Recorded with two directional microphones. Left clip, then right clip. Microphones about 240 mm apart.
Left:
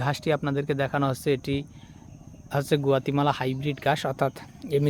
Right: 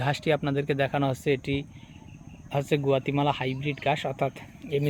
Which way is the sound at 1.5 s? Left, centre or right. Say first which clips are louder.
Left 1 dB; left.